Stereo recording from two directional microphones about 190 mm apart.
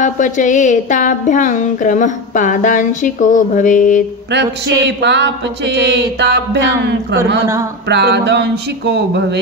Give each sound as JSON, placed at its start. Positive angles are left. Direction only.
{"t": 0.0, "sound": "speech", "side_deg": 40}
{"t": 4.8, "sound": "mantra", "side_deg": -65}